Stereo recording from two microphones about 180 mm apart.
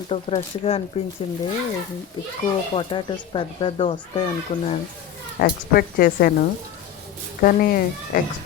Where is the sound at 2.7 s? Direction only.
25° left (ahead or behind).